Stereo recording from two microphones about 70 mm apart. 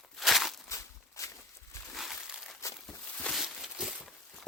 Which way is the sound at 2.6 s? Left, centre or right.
Left.